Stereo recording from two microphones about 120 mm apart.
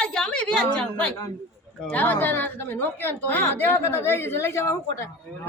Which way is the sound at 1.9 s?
15° left (ahead or behind).